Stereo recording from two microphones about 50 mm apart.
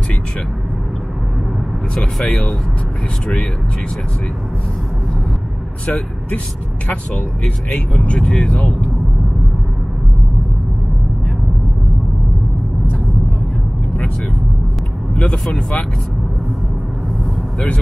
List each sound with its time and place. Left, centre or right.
2.2 s speech: left
5.9 s speech: left
7.4 s speech: left